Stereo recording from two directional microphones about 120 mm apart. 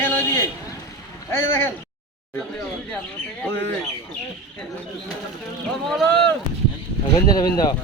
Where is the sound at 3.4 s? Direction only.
15° left (ahead or behind).